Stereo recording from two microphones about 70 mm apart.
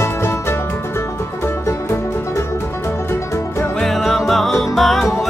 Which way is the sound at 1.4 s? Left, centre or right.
Left.